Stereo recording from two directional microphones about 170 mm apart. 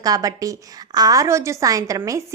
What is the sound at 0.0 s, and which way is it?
A woman's voice, 20° right (ahead or behind).